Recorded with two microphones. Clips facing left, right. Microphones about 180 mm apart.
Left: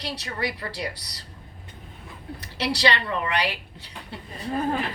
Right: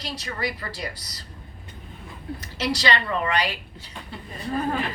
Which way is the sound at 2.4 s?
65° left (ahead or behind).